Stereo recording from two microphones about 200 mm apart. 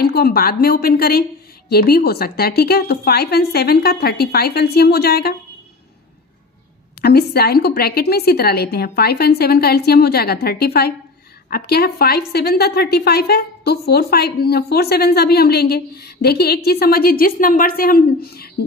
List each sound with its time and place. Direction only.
0.0 s a woman's voice: 50° left (ahead or behind)
7.0 s a woman's voice: 50° left (ahead or behind)